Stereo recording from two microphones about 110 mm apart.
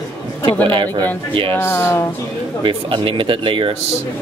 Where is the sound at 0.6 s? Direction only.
50° right (ahead or behind).